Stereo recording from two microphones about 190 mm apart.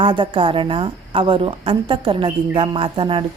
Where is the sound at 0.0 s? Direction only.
25° right (ahead or behind).